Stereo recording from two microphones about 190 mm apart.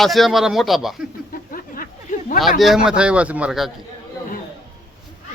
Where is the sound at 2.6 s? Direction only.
Centre (ahead or behind).